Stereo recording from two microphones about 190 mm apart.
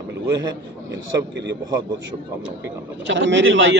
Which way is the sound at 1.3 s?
65° right (ahead or behind).